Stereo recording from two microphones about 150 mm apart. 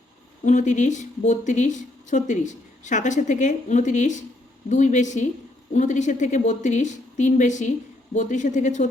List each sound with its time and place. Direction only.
0.4 s a woman's voice: 55° left (ahead or behind)